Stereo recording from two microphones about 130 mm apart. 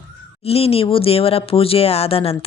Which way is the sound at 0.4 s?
50° left (ahead or behind).